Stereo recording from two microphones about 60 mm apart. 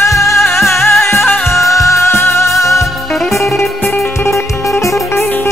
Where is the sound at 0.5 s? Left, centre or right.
Left.